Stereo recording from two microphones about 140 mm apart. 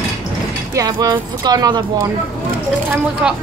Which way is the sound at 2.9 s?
5° right (ahead or behind).